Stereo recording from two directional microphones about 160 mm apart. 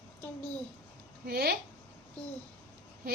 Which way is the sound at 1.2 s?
80° right.